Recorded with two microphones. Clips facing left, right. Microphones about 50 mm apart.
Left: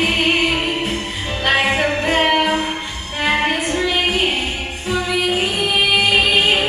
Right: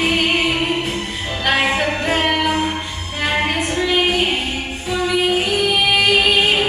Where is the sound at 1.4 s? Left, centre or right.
Centre.